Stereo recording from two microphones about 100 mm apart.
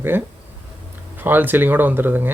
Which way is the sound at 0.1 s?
20° right (ahead or behind).